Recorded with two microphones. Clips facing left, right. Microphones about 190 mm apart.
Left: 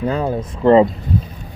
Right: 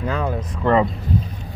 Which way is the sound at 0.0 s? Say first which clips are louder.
Left 4 dB; 30° left (ahead or behind).